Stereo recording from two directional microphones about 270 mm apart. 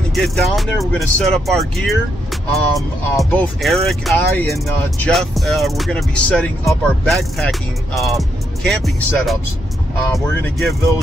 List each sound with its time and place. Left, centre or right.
0.1 s speech: centre